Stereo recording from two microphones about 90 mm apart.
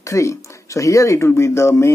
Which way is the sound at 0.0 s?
35° left (ahead or behind).